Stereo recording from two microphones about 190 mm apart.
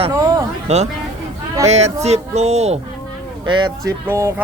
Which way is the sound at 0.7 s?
35° right (ahead or behind).